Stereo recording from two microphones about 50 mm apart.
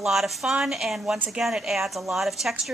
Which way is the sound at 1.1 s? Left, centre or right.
Centre.